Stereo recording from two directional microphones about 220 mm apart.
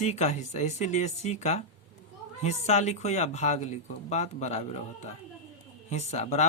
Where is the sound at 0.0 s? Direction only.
30° left (ahead or behind).